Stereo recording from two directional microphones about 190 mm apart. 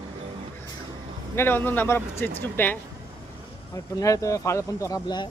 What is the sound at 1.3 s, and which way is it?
Speech, 10° left (ahead or behind).